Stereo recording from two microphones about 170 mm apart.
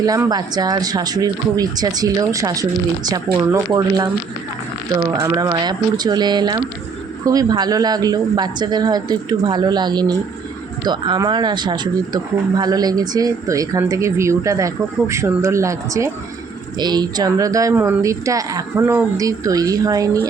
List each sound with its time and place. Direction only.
0.0 s speech: 20° right (ahead or behind)
5.1 s speech: 20° right (ahead or behind)